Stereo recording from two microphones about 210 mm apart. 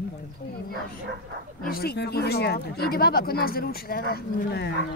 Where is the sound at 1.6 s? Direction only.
45° left (ahead or behind).